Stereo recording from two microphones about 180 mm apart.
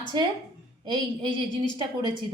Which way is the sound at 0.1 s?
25° right (ahead or behind).